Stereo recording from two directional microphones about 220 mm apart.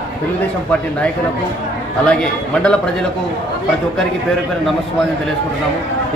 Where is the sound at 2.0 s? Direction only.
5° left (ahead or behind).